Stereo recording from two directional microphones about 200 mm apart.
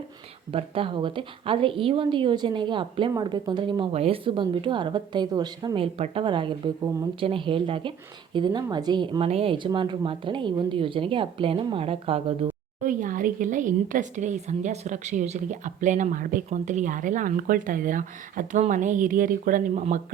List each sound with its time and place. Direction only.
0.5 s a woman's voice: 25° right (ahead or behind)
12.8 s speech: 40° right (ahead or behind)